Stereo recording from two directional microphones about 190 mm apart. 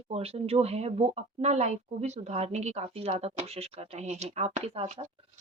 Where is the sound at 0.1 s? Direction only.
30° right (ahead or behind).